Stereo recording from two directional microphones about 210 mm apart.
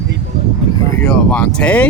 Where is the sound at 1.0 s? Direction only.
5° left (ahead or behind).